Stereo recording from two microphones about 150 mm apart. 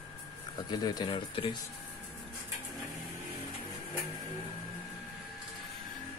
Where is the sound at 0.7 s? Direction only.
25° left (ahead or behind).